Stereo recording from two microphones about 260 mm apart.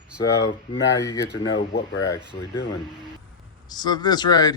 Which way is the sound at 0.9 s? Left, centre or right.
Centre.